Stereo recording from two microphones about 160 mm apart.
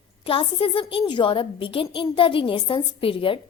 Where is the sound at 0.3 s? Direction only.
35° left (ahead or behind).